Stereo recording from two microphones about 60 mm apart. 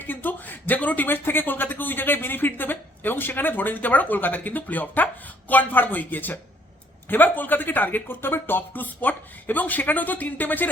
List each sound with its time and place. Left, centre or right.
0.0 s speech: left